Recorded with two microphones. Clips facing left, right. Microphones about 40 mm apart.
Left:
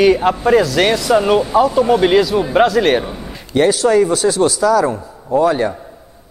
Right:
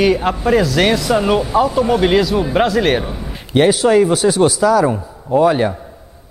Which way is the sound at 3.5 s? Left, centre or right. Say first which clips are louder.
Right 1 dB; centre.